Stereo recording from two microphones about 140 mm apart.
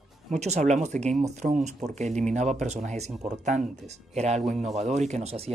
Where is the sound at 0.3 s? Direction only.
55° right (ahead or behind).